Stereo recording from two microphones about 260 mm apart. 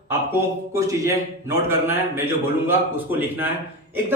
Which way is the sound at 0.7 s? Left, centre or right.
Centre.